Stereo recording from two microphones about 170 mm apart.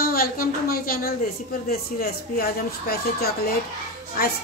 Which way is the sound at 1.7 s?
65° left (ahead or behind).